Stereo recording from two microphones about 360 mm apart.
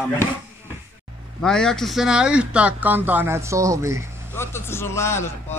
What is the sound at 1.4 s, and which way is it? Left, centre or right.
Speech, centre.